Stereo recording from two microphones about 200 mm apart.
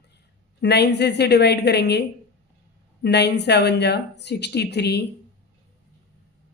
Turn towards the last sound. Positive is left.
turn(degrees=55)  # may be behind; listen again after turning